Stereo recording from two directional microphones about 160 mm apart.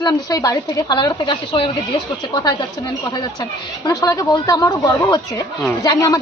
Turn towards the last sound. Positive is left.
turn(degrees=20)  # may be behind; listen again after turning